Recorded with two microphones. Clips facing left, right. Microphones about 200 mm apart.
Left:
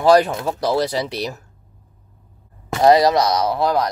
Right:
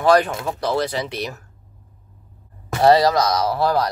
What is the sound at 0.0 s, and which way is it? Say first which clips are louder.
Speech: left 2 dB; 35° left (ahead or behind).